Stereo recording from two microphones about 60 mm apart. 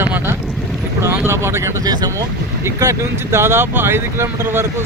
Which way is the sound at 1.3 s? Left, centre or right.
Right.